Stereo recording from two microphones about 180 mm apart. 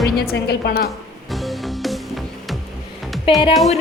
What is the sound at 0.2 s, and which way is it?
Speech, 65° left (ahead or behind).